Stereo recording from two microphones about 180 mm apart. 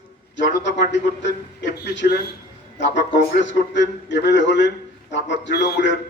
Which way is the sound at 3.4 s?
80° left.